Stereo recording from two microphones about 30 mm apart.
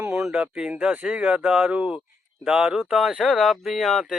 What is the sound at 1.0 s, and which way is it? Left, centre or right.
Speech, right.